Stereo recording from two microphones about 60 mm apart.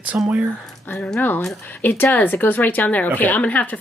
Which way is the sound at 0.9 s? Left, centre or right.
Centre.